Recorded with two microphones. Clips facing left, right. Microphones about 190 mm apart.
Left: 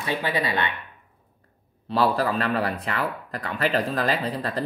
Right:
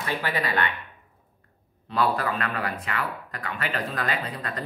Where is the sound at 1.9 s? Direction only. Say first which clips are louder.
Left 3 dB; 35° left (ahead or behind).